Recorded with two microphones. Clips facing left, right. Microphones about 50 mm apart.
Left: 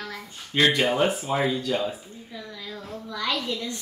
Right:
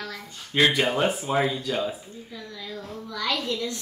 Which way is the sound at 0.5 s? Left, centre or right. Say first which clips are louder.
Even; centre.